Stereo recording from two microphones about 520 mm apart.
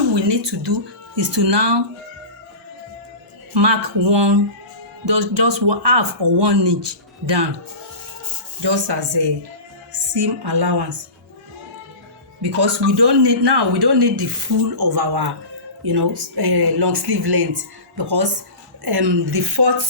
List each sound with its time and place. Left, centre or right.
0.1 s speech: right
3.5 s speech: right
8.6 s a woman's voice: right
12.4 s speech: right